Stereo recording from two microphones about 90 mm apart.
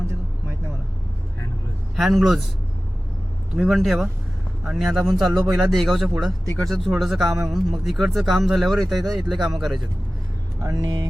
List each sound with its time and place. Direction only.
2.0 s speech: centre (ahead or behind)
3.5 s speech: 10° right (ahead or behind)
10.6 s speech: 40° right (ahead or behind)